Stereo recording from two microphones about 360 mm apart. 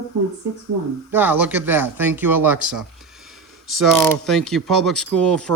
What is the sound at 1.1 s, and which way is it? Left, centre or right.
Speech, centre.